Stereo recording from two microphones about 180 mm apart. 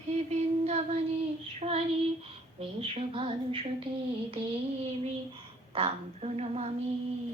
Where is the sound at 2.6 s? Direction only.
30° right (ahead or behind).